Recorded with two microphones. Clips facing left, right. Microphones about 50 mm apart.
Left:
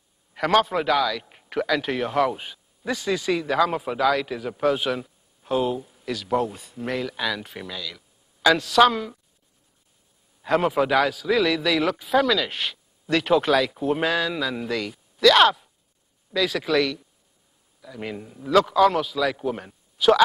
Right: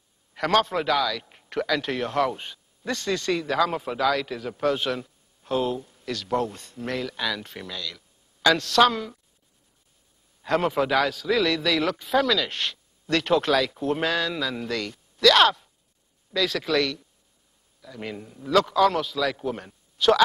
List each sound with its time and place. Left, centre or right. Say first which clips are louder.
0.3 s a man's voice: left 2 dB; centre
10.4 s a man's voice: left 2 dB; centre